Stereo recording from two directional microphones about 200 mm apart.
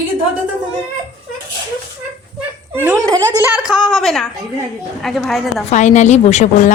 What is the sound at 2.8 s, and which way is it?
Speech, 15° right (ahead or behind).